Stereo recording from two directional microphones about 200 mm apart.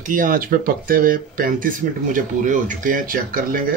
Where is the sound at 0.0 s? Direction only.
45° right (ahead or behind).